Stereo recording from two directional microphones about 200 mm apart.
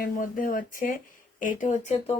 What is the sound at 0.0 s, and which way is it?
Speech, 45° left (ahead or behind).